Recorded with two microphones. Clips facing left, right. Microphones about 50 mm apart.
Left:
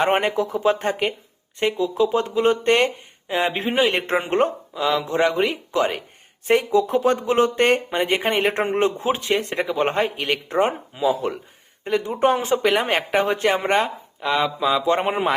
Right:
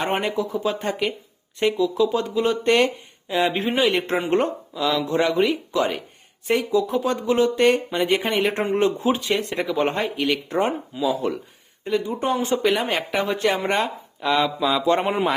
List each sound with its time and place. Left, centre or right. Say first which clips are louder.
0.0 s speech: left 4 dB; left
6.5 s speech: left 3 dB; left
14.3 s mantra: left 1 dB; centre